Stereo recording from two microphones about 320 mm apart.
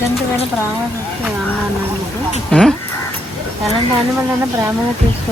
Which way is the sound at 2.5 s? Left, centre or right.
Centre.